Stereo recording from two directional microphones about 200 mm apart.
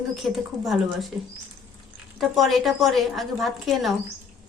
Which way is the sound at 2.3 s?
Centre (ahead or behind).